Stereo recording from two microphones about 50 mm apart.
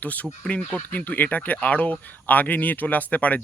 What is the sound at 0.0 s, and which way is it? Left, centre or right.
Speech, left.